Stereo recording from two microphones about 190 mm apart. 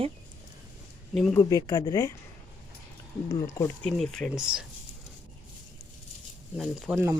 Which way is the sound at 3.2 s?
15° left (ahead or behind).